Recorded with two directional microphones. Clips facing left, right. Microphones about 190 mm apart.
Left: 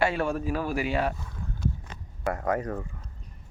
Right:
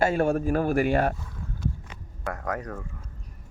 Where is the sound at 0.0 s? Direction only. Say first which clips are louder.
Right 4 dB; 45° right (ahead or behind).